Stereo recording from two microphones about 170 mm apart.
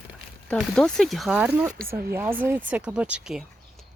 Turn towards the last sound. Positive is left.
turn(degrees=-5)  # may be behind; listen again after turning